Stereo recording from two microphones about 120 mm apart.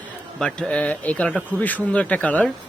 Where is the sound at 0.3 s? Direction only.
5° left (ahead or behind).